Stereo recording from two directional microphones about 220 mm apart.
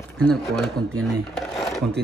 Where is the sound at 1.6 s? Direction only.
Centre (ahead or behind).